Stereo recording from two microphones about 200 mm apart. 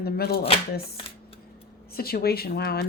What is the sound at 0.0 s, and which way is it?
Speech, 50° left (ahead or behind).